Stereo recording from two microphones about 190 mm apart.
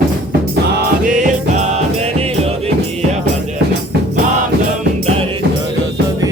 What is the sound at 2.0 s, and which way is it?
Music, 30° right (ahead or behind).